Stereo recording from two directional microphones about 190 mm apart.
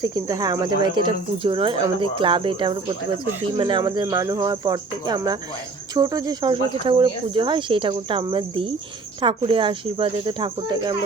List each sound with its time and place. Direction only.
0.0 s speech: 20° right (ahead or behind)